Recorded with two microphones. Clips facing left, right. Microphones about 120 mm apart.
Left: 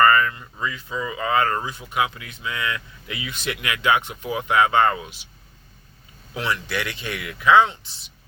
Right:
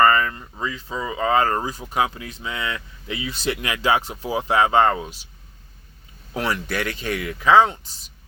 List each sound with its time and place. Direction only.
0.0 s speech: 30° right (ahead or behind)
6.3 s speech: 40° right (ahead or behind)